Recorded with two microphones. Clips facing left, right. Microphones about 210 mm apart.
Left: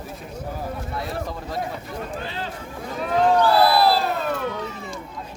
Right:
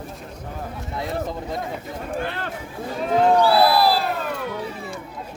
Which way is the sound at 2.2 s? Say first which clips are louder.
Right 2 dB; 60° right (ahead or behind).